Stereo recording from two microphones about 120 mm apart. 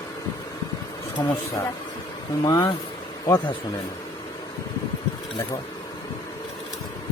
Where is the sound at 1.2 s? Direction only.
35° left (ahead or behind).